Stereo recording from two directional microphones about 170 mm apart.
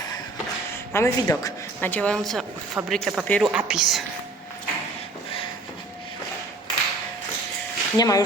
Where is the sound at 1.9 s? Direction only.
5° left (ahead or behind).